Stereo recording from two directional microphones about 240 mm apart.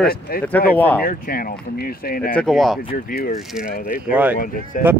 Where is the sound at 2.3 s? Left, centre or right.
Centre.